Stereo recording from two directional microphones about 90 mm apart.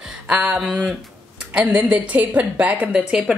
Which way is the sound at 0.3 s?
15° right (ahead or behind).